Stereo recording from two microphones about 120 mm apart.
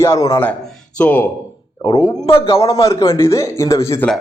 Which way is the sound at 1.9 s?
45° left (ahead or behind).